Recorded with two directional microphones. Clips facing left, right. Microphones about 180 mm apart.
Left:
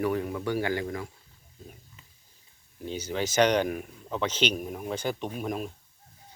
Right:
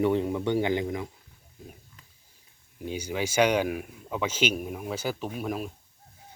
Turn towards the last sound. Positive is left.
turn(degrees=-5)  # may be behind; listen again after turning